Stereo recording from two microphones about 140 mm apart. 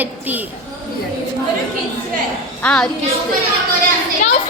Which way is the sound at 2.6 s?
5° left (ahead or behind).